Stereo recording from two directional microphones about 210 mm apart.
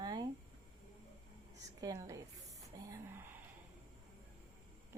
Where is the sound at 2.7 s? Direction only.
15° right (ahead or behind).